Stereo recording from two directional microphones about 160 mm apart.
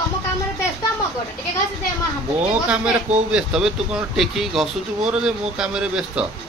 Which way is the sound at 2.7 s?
5° right (ahead or behind).